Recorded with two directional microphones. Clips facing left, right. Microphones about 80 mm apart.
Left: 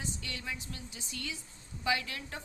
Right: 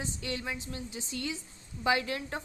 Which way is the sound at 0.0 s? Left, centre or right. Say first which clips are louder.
Right 5 dB; right.